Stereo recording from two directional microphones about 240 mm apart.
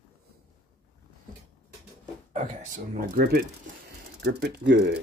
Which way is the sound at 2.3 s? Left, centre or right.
Right.